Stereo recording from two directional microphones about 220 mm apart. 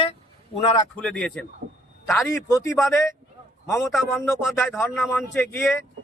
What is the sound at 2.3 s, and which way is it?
Speech, 15° left (ahead or behind).